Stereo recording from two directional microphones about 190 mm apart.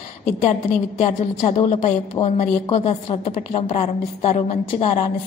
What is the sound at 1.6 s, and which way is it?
A woman's voice, 30° left (ahead or behind).